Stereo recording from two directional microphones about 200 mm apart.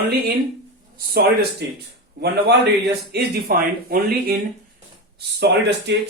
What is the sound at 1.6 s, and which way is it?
Speech, 55° right (ahead or behind).